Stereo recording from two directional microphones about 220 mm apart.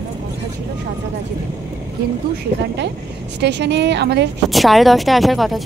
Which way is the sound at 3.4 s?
50° right (ahead or behind).